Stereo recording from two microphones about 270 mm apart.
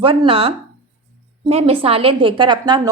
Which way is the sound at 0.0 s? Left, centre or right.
Centre.